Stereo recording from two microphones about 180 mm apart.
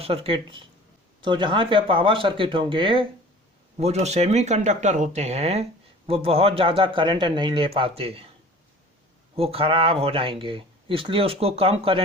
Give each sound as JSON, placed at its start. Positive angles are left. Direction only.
{"t": 0.0, "sound": "speech", "side_deg": -30}
{"t": 9.3, "sound": "speech", "side_deg": -30}